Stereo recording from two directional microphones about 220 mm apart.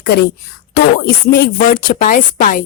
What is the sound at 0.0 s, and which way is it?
A woman's voice, 45° left (ahead or behind).